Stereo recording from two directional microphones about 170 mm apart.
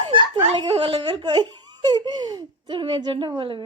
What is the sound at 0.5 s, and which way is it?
Speech, 35° right (ahead or behind).